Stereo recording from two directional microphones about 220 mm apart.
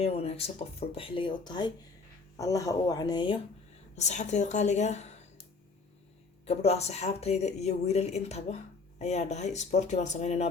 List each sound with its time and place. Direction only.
0.0 s speech: 25° left (ahead or behind)
3.9 s speech: 30° left (ahead or behind)
6.4 s speech: 30° left (ahead or behind)